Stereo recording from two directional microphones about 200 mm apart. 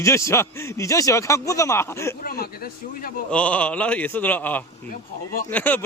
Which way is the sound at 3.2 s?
5° left (ahead or behind).